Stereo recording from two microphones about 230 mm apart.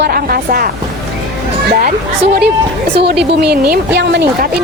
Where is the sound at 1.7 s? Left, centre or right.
Right.